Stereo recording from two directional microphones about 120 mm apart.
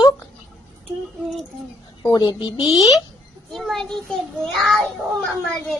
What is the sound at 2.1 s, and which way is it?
Speech, 30° left (ahead or behind).